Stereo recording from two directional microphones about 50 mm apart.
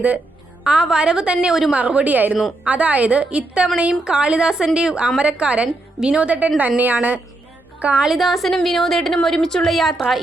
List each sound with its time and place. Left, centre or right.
0.6 s a woman's voice: centre; by 7.2 s right
7.9 s a woman's voice: centre